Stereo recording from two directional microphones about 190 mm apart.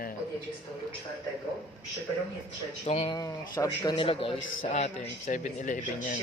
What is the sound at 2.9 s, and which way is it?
Speech, 35° left (ahead or behind).